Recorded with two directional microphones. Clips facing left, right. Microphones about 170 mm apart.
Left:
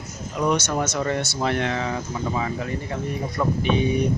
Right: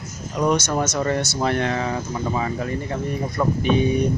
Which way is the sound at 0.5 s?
40° right (ahead or behind).